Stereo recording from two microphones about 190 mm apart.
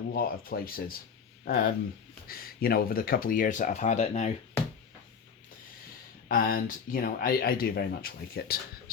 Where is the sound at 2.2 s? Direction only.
50° left (ahead or behind); by 4.3 s 35° left (ahead or behind).